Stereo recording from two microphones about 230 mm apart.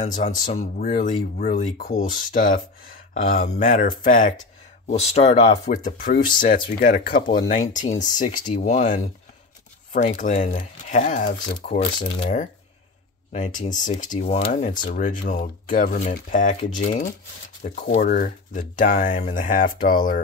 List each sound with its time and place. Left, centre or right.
0.0 s speech: left
13.3 s speech: left